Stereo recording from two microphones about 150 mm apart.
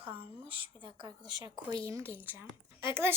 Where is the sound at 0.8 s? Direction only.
30° right (ahead or behind); by 2.8 s 15° right (ahead or behind).